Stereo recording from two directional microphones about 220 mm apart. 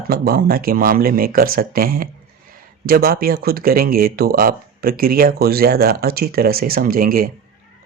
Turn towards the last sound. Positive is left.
turn(degrees=-40)  # may be behind; listen again after turning